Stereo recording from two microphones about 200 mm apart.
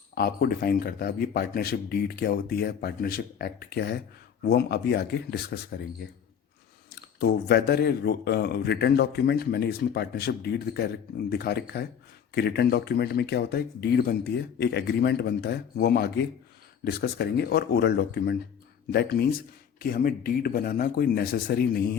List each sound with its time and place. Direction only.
0.1 s speech: 50° left (ahead or behind)
6.9 s speech: 55° left (ahead or behind)